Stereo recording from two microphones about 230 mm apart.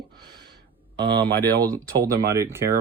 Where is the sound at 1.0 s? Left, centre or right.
Right.